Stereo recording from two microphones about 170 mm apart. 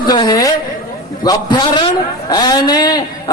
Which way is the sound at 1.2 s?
25° left (ahead or behind).